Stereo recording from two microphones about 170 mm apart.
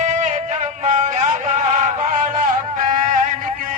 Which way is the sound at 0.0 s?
45° right (ahead or behind).